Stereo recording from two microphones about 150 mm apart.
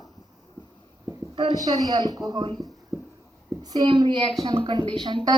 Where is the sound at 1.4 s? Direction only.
30° right (ahead or behind).